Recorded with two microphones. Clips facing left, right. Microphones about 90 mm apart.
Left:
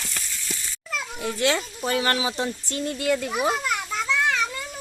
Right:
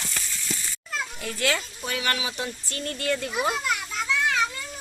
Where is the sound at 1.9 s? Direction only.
35° left (ahead or behind); by 3.3 s 5° left (ahead or behind).